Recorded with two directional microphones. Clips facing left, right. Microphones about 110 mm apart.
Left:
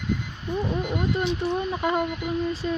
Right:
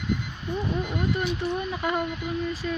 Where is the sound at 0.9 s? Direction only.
25° left (ahead or behind).